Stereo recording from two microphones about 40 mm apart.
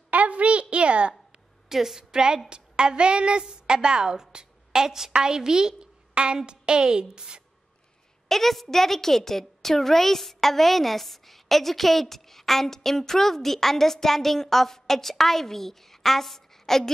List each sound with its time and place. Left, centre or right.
0.1 s a sound: right
1.7 s a woman's voice: centre
8.3 s a woman's voice: centre